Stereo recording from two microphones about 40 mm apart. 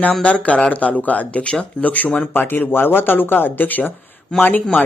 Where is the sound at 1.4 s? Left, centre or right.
Left.